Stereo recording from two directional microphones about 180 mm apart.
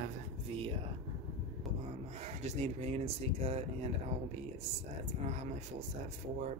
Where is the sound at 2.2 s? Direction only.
35° right (ahead or behind).